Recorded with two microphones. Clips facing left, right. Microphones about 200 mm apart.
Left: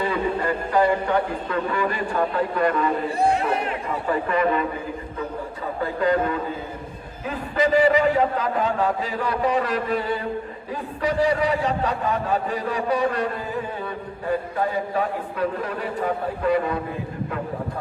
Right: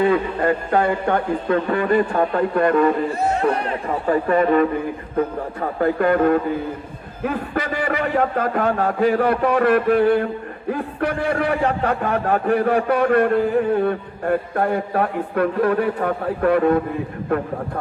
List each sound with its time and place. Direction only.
0.0 s a man's voice: 55° right (ahead or behind)